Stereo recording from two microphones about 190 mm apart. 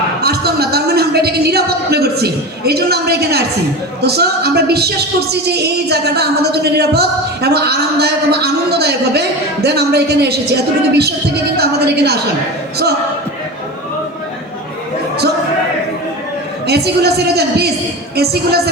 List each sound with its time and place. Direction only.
0.2 s a sound: 55° right (ahead or behind)
4.0 s speech: 55° right (ahead or behind)
11.5 s speech: 55° right (ahead or behind)
16.6 s speech: 60° right (ahead or behind)